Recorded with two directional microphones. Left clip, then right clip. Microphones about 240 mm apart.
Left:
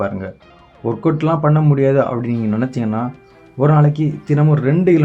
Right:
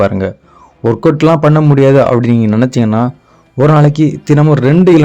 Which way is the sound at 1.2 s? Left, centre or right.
Right.